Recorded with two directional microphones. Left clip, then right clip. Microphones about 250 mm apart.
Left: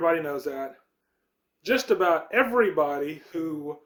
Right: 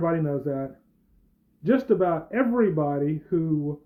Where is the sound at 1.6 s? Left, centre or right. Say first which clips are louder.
Even; centre.